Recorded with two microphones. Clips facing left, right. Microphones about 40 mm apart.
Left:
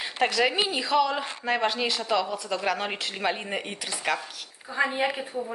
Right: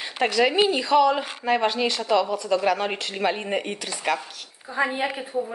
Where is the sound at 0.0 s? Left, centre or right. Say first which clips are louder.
Right 3 dB; centre.